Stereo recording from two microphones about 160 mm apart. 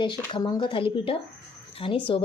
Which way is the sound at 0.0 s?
30° left (ahead or behind).